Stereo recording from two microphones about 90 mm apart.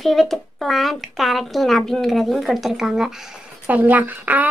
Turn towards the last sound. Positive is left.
turn(degrees=-20)  # may be behind; listen again after turning